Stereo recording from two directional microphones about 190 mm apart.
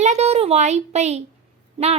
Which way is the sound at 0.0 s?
35° right (ahead or behind).